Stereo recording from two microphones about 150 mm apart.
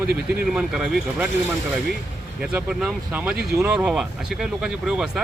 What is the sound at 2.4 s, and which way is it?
Speech, 5° right (ahead or behind).